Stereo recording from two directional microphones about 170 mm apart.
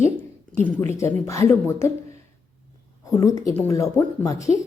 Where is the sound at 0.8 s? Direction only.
15° left (ahead or behind).